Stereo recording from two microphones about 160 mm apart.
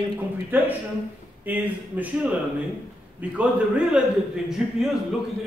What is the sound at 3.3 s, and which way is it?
Speech, 10° right (ahead or behind).